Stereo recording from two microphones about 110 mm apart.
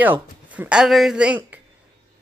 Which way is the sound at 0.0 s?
15° right (ahead or behind).